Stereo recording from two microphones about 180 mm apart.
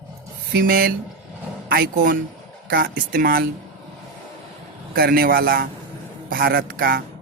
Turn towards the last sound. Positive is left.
turn(degrees=-55)  # may be behind; listen again after turning